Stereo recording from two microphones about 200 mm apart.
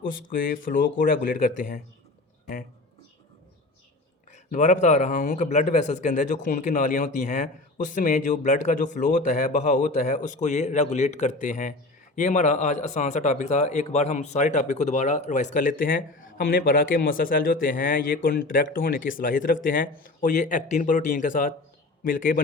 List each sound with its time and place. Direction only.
0.3 s speech: 40° left (ahead or behind)
4.3 s speech: 35° left (ahead or behind)